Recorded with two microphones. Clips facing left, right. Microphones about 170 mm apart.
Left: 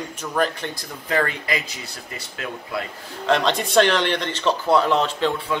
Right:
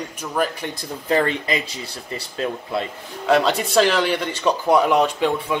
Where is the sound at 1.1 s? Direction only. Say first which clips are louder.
Right 3 dB; 25° right (ahead or behind).